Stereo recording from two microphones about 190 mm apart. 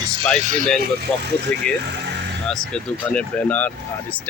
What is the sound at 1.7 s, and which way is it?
Speech, 5° left (ahead or behind).